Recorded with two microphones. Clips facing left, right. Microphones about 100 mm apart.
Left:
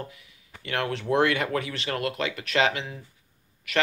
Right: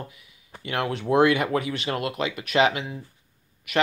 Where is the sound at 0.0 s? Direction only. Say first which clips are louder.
Left 1 dB; 20° right (ahead or behind).